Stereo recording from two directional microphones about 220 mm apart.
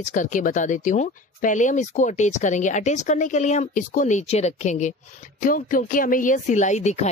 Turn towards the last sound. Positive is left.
turn(degrees=30)  # may be behind; listen again after turning